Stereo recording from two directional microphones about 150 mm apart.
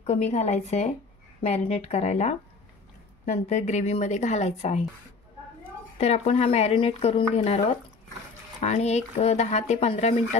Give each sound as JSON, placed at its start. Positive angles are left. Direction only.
{"t": 0.0, "sound": "speech", "side_deg": 50}
{"t": 5.9, "sound": "speech", "side_deg": 45}